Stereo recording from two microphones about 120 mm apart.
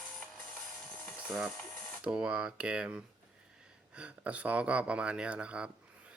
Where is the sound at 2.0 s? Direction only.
10° right (ahead or behind).